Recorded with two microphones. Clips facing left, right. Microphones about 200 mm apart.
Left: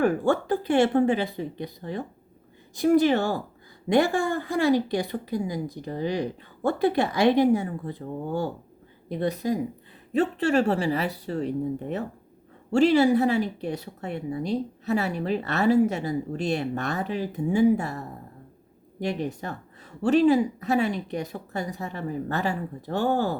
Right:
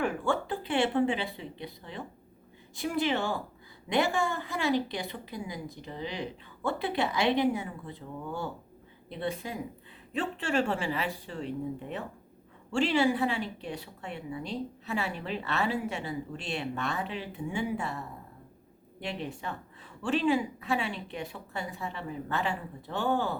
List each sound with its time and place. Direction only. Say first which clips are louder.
0.0 s speech: left 7 dB; 40° left (ahead or behind)